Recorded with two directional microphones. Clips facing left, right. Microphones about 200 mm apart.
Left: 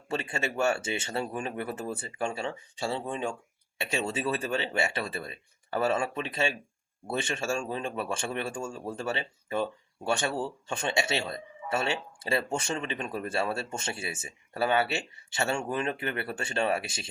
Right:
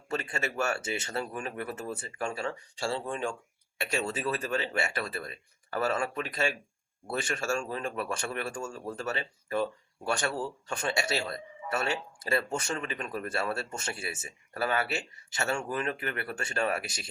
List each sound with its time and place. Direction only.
0.1 s speech: 30° left (ahead or behind)